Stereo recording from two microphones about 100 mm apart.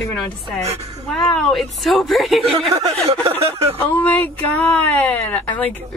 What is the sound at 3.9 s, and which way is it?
Speech, 20° left (ahead or behind).